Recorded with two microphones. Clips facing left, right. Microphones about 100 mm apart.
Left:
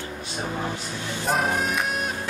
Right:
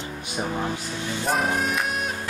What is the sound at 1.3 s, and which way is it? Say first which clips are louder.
Music: even; centre (ahead or behind).